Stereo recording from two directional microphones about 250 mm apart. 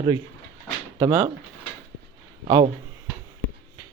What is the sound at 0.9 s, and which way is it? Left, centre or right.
Speech, centre.